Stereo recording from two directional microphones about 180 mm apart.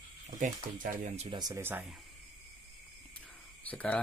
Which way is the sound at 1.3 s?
20° right (ahead or behind).